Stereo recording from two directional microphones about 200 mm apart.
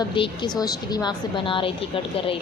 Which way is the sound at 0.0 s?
20° left (ahead or behind).